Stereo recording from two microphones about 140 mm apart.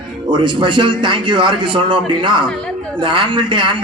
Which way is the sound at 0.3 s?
35° right (ahead or behind).